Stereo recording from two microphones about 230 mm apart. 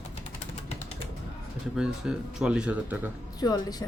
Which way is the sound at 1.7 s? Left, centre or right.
Centre.